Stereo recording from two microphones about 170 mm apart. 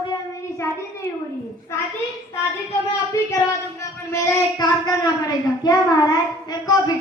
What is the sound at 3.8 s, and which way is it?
A woman's voice, 15° left (ahead or behind).